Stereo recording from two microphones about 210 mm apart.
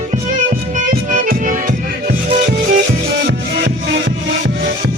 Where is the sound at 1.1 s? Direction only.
40° right (ahead or behind).